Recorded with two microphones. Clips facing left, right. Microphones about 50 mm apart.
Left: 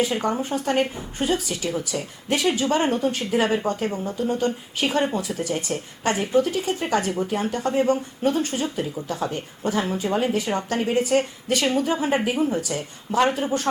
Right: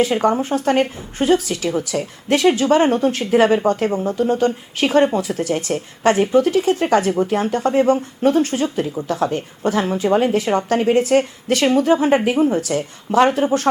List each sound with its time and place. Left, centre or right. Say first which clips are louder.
0.0 s a woman's voice: right 6 dB; right